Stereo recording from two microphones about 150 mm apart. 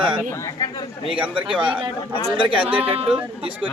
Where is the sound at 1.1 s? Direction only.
5° right (ahead or behind).